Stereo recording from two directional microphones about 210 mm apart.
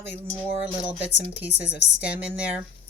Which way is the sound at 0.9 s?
5° right (ahead or behind).